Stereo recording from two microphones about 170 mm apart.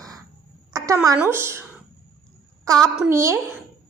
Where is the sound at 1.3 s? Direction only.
15° right (ahead or behind).